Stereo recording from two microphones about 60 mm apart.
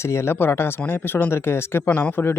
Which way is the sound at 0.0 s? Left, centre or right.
Left.